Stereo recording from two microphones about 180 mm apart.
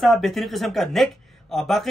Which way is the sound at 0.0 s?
Centre (ahead or behind).